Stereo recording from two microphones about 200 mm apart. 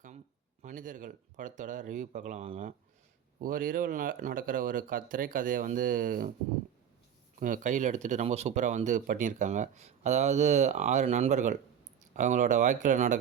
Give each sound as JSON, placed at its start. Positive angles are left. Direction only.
{"t": 0.6, "sound": "speech", "side_deg": -40}
{"t": 7.3, "sound": "speech", "side_deg": -40}